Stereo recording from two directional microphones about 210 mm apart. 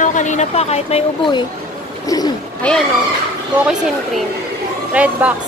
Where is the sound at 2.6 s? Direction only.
5° left (ahead or behind).